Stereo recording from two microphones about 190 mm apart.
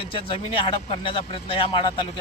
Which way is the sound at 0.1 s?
30° left (ahead or behind).